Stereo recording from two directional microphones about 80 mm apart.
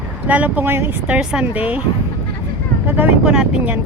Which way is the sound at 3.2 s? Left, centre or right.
Centre.